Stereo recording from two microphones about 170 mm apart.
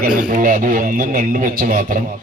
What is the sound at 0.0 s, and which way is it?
Speech, 55° right (ahead or behind).